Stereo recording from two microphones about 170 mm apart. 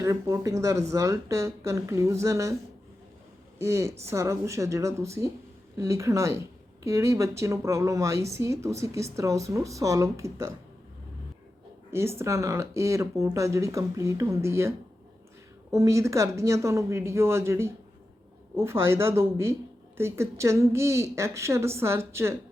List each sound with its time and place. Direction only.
0.0 s speech: 20° right (ahead or behind)
3.6 s speech: 15° right (ahead or behind)
11.9 s speech: 15° right (ahead or behind)
15.7 s speech: 20° right (ahead or behind)